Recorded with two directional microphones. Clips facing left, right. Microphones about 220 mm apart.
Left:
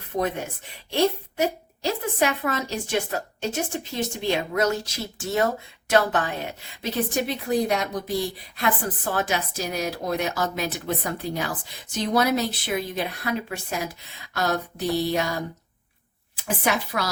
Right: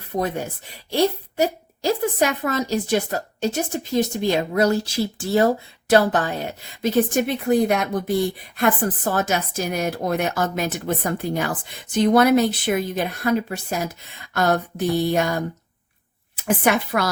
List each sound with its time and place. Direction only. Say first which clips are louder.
0.9 s a woman's voice: right 2 dB; 40° right (ahead or behind)
16.6 s speech: right 4 dB; 55° right (ahead or behind)